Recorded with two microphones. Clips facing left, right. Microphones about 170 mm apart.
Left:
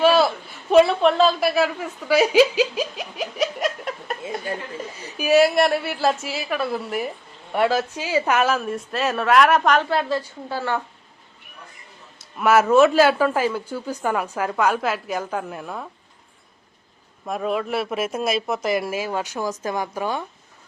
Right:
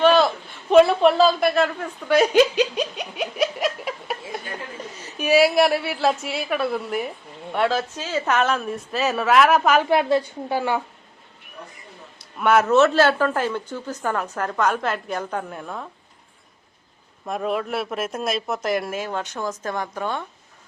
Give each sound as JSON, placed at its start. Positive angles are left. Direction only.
{"t": 0.0, "sound": "a sound", "side_deg": 5}
{"t": 0.7, "sound": "a woman's voice", "side_deg": 0}
{"t": 9.9, "sound": "a woman's voice", "side_deg": -15}
{"t": 12.4, "sound": "speech", "side_deg": 5}
{"t": 17.2, "sound": "speech", "side_deg": 0}